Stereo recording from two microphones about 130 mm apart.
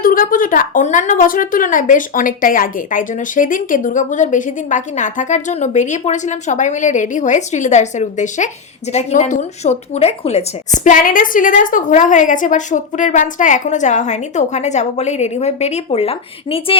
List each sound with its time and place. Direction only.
0.0 s a woman's voice: 90° left; by 10.4 s 55° left (ahead or behind)
10.8 s speech: 90° left; by 16.7 s 45° left (ahead or behind)